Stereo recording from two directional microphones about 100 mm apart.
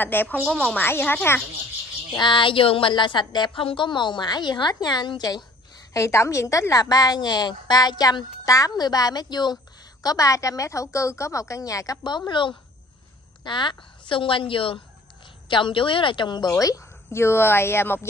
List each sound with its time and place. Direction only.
0.0 s speech: 20° left (ahead or behind)
0.5 s a woman's voice: 10° left (ahead or behind)
0.8 s speech: 20° left (ahead or behind)
2.1 s a woman's voice: 55° left (ahead or behind)
5.9 s a woman's voice: 30° left (ahead or behind)
12.3 s a woman's voice: 55° left (ahead or behind); by 18.0 s 25° left (ahead or behind)